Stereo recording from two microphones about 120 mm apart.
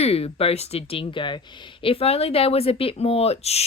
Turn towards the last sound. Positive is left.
turn(degrees=60)  # may be behind; listen again after turning